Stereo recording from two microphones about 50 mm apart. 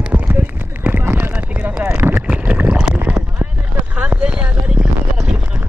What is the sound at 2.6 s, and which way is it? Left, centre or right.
Boat, right.